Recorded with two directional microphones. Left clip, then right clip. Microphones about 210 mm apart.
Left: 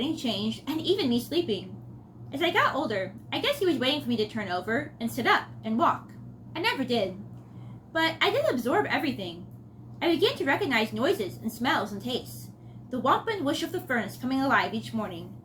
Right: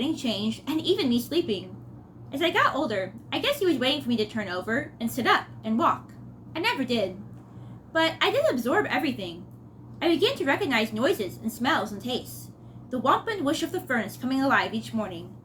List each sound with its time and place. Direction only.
0.0 s a woman's voice: 20° right (ahead or behind)